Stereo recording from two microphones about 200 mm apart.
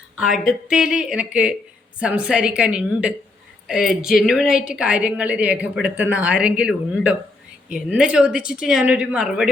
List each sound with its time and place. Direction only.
0.2 s a woman's voice: centre (ahead or behind)